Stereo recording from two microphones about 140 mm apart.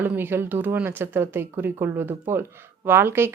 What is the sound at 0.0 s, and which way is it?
A man's voice, 15° right (ahead or behind).